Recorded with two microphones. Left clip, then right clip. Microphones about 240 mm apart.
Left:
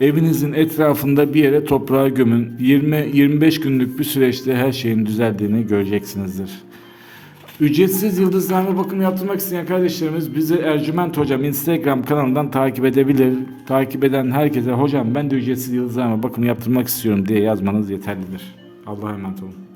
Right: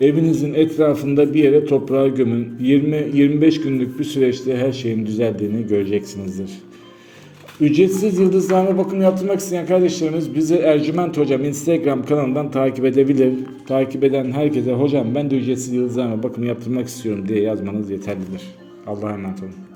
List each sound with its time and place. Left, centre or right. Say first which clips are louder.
0.0 s speech: right 1 dB; left
7.6 s speech: right 1 dB; left